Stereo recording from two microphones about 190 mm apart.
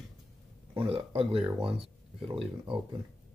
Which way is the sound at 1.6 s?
30° right (ahead or behind).